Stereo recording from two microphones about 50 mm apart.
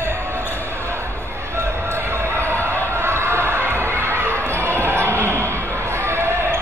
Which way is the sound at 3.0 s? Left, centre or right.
Right.